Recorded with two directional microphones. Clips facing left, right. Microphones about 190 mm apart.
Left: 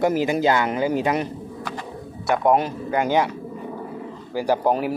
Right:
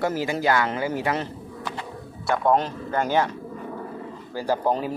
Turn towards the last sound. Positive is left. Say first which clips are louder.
# left 3 dB
turn(degrees=15)  # may be behind; listen again after turning